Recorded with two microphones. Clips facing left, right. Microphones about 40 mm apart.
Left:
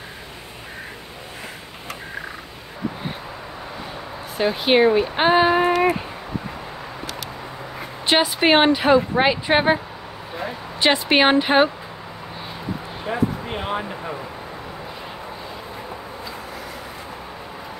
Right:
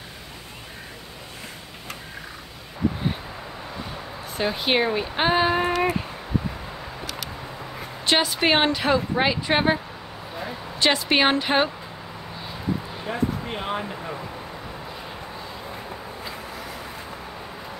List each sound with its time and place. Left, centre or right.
4.4 s speech: centre
8.1 s speech: centre
13.0 s speech: centre